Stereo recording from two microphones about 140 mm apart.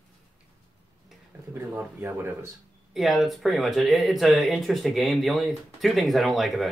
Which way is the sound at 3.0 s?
Centre (ahead or behind).